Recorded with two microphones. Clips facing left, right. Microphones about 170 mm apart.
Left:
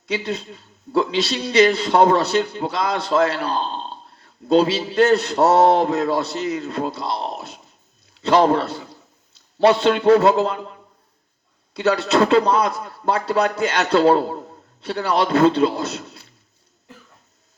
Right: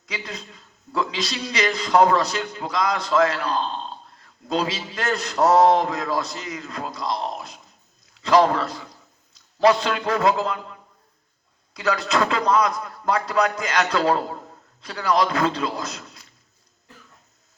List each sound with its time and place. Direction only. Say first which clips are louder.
0.0 s a man's voice: left 9 dB; 30° left (ahead or behind)